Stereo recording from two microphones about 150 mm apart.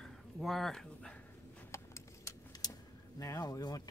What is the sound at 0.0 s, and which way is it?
Speech, centre (ahead or behind).